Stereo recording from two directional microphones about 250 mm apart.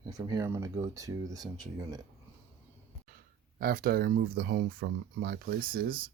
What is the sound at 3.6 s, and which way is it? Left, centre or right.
Speech, right.